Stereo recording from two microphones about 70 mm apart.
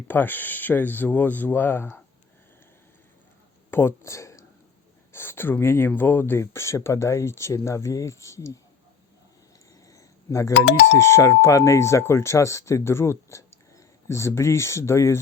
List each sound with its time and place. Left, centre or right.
0.1 s speech: left
3.7 s speech: left
5.1 s speech: left
9.9 s speech: left